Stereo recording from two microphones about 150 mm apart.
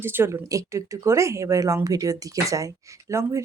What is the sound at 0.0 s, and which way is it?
Speech, 15° right (ahead or behind).